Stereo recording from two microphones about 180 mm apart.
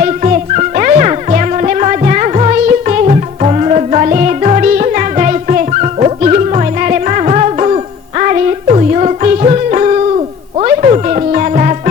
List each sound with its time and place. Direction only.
0.0 s music: 40° right (ahead or behind)